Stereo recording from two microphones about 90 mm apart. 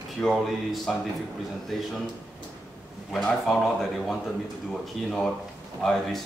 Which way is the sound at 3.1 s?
Centre (ahead or behind).